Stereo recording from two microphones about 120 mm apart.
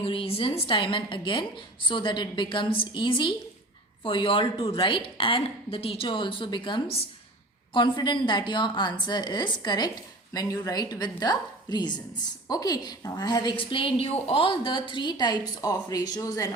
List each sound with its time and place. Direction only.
0.0 s a woman's voice: 50° left (ahead or behind); by 16.5 s 30° left (ahead or behind)